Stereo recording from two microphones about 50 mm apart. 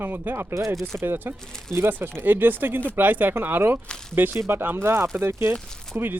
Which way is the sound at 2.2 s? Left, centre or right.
Right.